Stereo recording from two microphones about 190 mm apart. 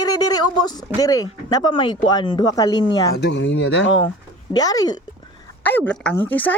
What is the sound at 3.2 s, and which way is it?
Speech, 65° left (ahead or behind).